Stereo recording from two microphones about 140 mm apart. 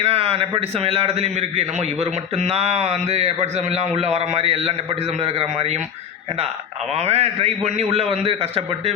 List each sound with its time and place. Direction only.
0.0 s a man's voice: 45° right (ahead or behind)
6.9 s a man's voice: 50° right (ahead or behind)